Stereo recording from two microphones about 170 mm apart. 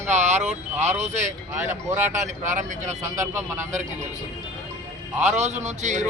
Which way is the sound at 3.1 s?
15° right (ahead or behind).